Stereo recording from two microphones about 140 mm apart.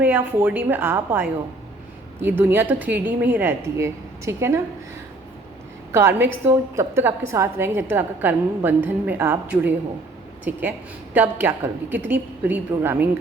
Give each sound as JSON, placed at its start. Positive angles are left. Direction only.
{"t": 0.0, "sound": "a woman's voice", "side_deg": -15}
{"t": 5.9, "sound": "a woman's voice", "side_deg": -20}